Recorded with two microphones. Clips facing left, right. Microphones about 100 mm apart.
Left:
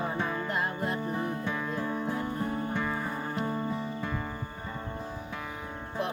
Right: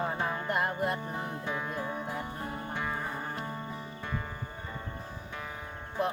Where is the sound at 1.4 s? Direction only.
10° right (ahead or behind).